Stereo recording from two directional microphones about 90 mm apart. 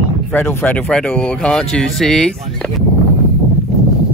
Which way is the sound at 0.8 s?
10° left (ahead or behind).